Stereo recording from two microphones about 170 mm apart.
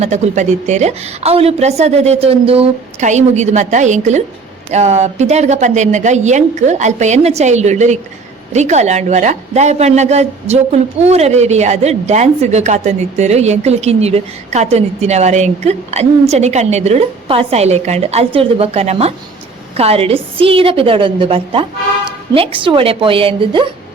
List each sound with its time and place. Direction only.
0.0 s a woman's voice: 45° right (ahead or behind)